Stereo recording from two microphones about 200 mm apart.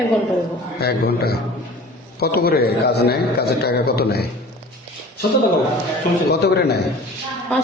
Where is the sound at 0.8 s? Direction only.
50° left (ahead or behind).